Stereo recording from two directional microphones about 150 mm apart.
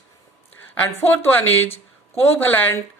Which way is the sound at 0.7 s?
15° left (ahead or behind).